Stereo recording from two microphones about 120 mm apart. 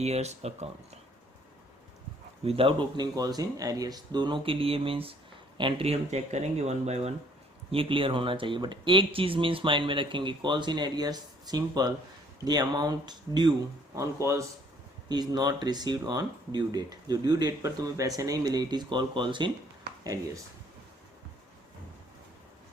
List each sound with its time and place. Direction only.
0.0 s speech: 65° right (ahead or behind)
2.4 s speech: 50° right (ahead or behind)
7.7 s speech: 50° right (ahead or behind)
13.9 s speech: 25° right (ahead or behind); by 19.5 s 40° right (ahead or behind)